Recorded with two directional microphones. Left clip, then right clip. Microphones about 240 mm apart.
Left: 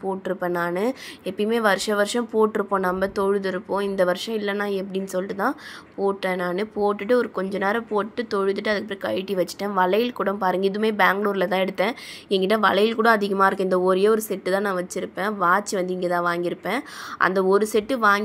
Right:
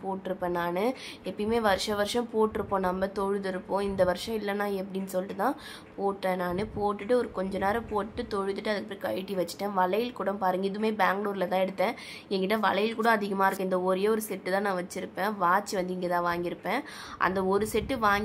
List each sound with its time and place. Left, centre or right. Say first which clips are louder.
0.3 s a woman's voice: left 5 dB; centre